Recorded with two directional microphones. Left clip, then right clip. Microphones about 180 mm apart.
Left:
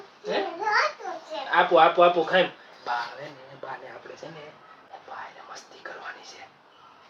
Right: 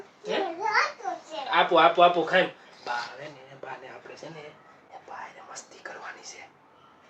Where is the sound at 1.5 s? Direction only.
5° right (ahead or behind).